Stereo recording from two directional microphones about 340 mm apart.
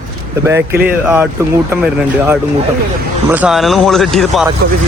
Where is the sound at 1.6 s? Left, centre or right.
Centre.